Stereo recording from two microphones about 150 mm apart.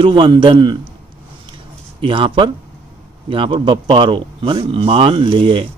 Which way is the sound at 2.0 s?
35° right (ahead or behind).